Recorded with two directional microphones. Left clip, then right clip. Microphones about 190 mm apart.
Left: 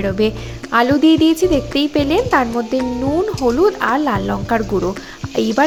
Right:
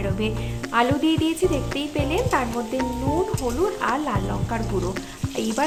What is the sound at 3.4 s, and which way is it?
Speech, 35° left (ahead or behind).